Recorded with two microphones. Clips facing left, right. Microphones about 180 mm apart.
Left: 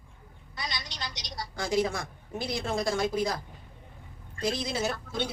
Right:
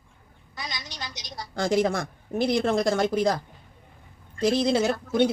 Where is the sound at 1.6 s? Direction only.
75° right (ahead or behind); by 3.3 s 60° right (ahead or behind).